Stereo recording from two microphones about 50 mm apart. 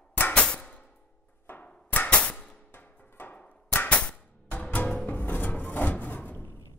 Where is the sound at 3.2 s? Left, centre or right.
Left.